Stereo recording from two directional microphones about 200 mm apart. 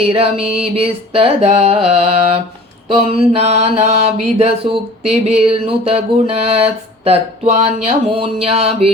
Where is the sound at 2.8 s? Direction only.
30° right (ahead or behind).